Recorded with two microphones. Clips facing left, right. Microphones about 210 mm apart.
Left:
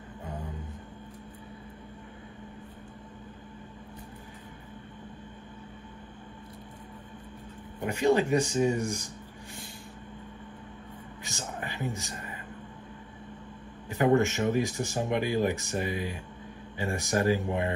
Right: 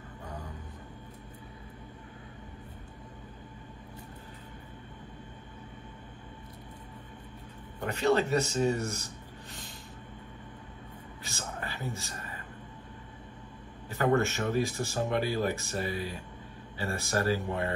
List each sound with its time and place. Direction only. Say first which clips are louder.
7.8 s speech: left 2 dB; 10° left (ahead or behind)
11.2 s a sound: left 2 dB; 20° left (ahead or behind)
13.8 s speech: left 3 dB; 15° left (ahead or behind)